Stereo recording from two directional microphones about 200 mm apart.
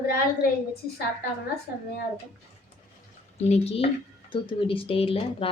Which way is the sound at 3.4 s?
30° left (ahead or behind).